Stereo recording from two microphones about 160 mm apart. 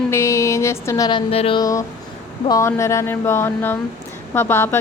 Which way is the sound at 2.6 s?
20° left (ahead or behind).